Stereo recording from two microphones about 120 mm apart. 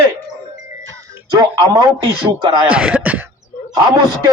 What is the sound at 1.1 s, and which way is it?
Speech, 35° right (ahead or behind).